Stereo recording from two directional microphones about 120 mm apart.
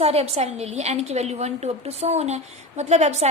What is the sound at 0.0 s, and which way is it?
A woman's voice, 60° right (ahead or behind).